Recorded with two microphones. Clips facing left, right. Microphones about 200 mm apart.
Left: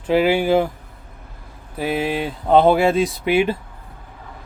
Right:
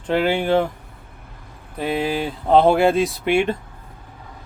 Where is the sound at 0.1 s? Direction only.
5° left (ahead or behind).